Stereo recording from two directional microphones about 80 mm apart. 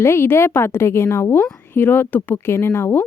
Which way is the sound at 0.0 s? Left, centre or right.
Left.